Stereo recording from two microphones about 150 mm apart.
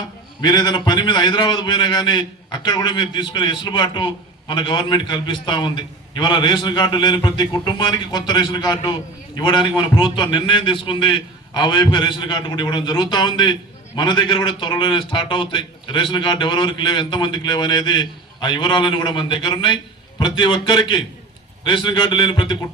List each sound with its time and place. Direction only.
0.4 s a man's voice: 30° left (ahead or behind)